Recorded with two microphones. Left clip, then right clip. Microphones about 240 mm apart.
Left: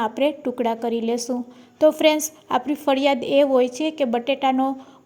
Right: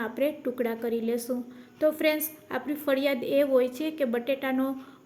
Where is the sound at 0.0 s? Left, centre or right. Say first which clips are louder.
Left 7 dB; left.